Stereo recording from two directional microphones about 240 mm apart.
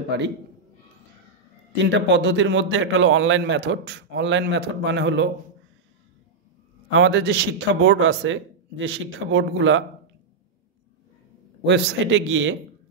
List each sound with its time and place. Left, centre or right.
0.1 s a man's voice: right
1.9 s a man's voice: right
6.9 s a man's voice: right
11.6 s a man's voice: right